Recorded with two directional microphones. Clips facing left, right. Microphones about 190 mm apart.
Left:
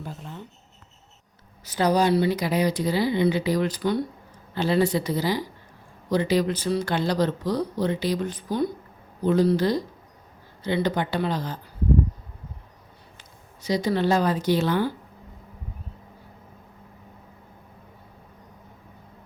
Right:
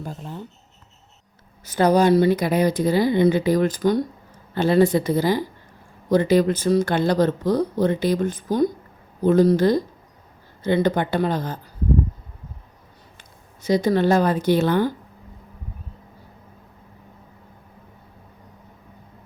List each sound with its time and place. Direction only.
0.0 s speech: 40° right (ahead or behind)
1.6 s speech: 50° right (ahead or behind)
13.6 s speech: 50° right (ahead or behind)